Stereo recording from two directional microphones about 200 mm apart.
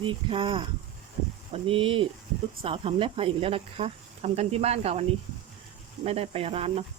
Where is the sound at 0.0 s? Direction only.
25° right (ahead or behind).